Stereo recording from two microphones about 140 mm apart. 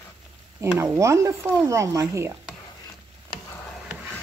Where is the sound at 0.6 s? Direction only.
20° right (ahead or behind).